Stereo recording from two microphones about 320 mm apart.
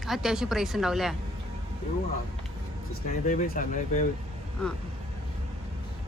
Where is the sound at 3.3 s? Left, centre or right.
Left.